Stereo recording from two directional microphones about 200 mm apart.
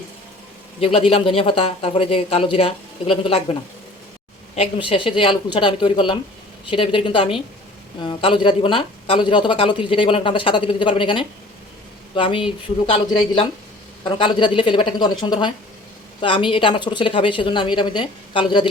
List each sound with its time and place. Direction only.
0.9 s speech: 30° left (ahead or behind)